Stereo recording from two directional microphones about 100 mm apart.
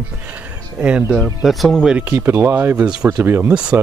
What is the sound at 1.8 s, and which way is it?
Speech, 15° right (ahead or behind).